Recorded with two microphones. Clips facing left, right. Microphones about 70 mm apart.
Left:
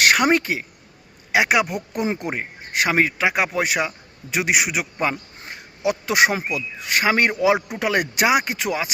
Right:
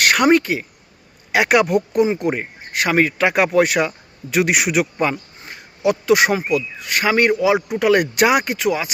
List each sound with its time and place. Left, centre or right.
0.0 s speech: centre
1.3 s speech: centre
1.9 s speech: left
3.1 s a man's voice: centre
5.4 s a sound: left
6.1 s speech: left
8.4 s speech: left